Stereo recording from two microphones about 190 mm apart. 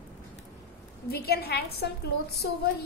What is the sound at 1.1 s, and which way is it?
Speech, 55° left (ahead or behind).